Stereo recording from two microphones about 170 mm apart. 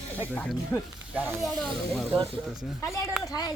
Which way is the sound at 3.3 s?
25° left (ahead or behind).